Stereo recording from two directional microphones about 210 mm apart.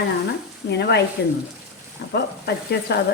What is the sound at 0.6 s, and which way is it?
Speech, 50° left (ahead or behind).